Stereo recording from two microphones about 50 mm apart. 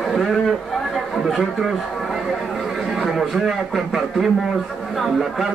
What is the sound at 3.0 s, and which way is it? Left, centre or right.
A man's voice, centre.